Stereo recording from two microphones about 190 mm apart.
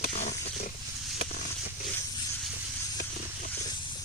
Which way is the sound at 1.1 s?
40° left (ahead or behind).